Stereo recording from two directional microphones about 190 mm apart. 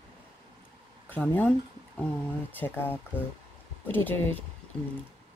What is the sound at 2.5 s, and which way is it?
A woman's voice, 10° left (ahead or behind).